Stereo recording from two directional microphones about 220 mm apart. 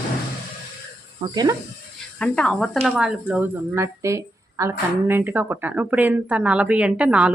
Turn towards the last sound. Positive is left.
turn(degrees=-5)  # may be behind; listen again after turning